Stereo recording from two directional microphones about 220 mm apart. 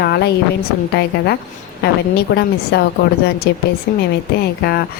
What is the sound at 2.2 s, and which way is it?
Speech, 50° left (ahead or behind).